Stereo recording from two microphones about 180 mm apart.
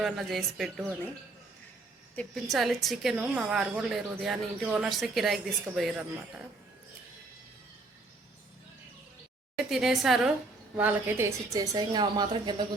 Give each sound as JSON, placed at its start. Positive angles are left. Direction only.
{"t": 0.0, "sound": "a woman's voice", "side_deg": 0}
{"t": 2.1, "sound": "a woman's voice", "side_deg": 0}
{"t": 9.6, "sound": "a woman's voice", "side_deg": 0}